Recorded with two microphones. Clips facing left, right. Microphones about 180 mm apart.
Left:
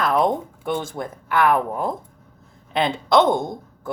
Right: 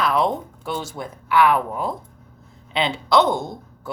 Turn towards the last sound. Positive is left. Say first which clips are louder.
# left 3 dB
turn(degrees=50)  # may be behind; listen again after turning